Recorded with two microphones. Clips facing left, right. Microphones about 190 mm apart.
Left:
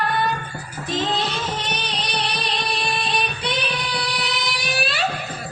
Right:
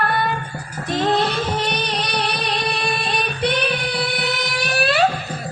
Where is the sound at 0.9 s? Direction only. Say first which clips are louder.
Right 5 dB; 60° right (ahead or behind).